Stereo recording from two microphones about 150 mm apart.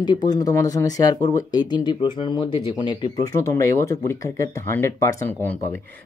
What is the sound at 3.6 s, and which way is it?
Speech, 20° left (ahead or behind).